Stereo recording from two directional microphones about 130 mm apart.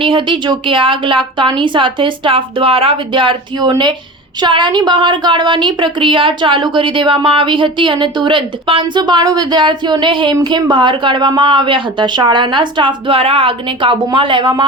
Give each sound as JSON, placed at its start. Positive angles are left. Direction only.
{"t": 0.0, "sound": "speech", "side_deg": -40}